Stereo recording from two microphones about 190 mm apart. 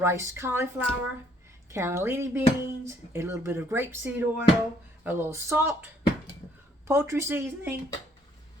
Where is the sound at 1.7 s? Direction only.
15° right (ahead or behind).